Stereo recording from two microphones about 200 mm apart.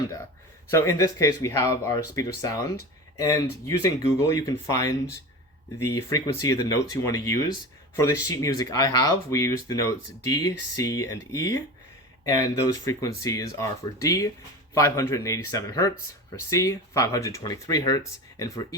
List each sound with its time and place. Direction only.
0.7 s speech: 15° left (ahead or behind)